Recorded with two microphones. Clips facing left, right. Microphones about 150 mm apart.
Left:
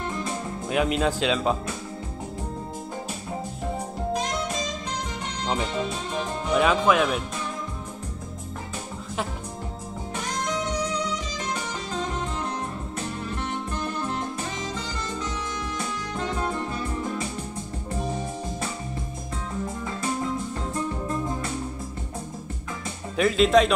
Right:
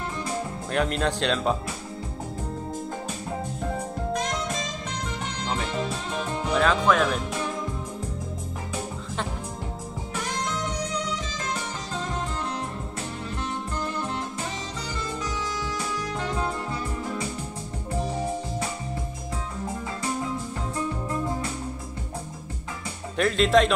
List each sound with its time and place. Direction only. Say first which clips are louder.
0.7 s speech: left 2 dB; 5° left (ahead or behind)
6.5 s speech: left 1 dB; 10° left (ahead or behind)
23.1 s speech: left 1 dB; centre (ahead or behind)